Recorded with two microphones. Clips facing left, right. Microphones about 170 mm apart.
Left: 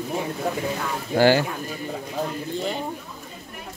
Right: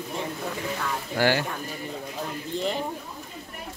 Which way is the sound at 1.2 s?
30° left (ahead or behind).